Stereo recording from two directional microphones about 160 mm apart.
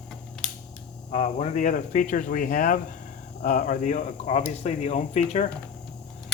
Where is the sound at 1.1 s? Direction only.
45° left (ahead or behind).